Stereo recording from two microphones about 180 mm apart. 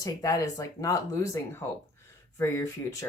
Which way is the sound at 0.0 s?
20° left (ahead or behind).